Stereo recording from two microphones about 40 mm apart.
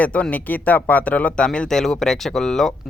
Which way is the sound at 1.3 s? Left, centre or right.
Left.